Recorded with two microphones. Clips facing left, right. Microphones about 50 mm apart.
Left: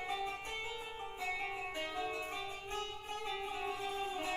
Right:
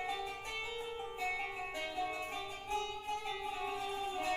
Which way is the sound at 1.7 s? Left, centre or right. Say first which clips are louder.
Right 2 dB; centre.